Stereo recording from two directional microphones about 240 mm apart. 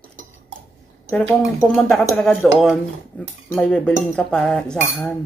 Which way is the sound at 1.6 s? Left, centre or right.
Centre.